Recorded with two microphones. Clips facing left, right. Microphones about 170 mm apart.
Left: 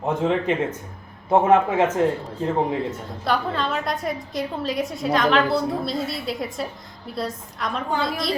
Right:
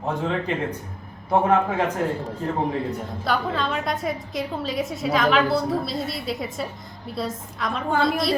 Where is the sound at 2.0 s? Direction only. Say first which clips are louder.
Left 4 dB; 25° left (ahead or behind).